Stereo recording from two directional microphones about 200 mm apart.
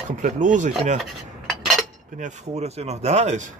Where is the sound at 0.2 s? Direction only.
40° right (ahead or behind).